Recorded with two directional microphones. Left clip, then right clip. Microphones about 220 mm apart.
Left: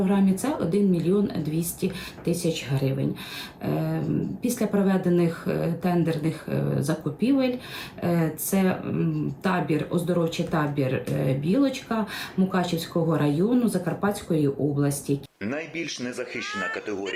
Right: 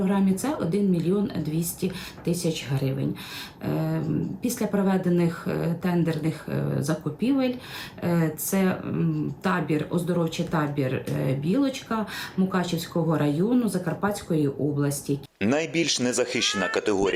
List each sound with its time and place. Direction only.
0.0 s speech: centre (ahead or behind)
15.4 s speech: 45° right (ahead or behind)